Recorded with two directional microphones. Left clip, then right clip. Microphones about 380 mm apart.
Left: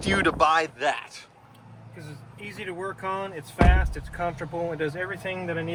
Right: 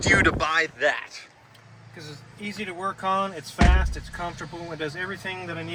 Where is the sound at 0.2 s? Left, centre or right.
Centre.